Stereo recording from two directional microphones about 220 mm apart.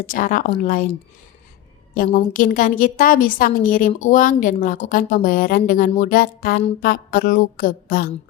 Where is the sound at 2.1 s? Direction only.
35° left (ahead or behind).